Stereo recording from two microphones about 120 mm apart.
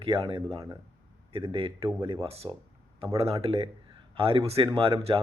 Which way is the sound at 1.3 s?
50° right (ahead or behind).